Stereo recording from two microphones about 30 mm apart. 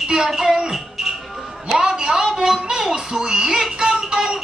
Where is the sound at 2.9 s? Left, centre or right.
Right.